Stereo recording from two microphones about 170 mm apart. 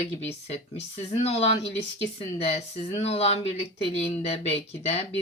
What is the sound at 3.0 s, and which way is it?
Speech, 35° left (ahead or behind).